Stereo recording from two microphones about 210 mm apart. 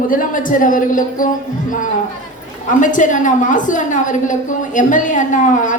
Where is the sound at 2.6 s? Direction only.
35° left (ahead or behind).